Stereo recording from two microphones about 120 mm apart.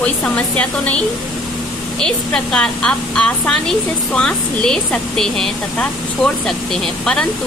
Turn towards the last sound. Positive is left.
turn(degrees=5)  # may be behind; listen again after turning